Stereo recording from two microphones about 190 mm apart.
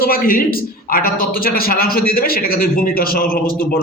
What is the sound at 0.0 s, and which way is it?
A man's voice, 50° left (ahead or behind).